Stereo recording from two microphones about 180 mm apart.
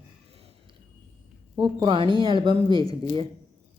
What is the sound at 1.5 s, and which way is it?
A woman's voice, 25° right (ahead or behind).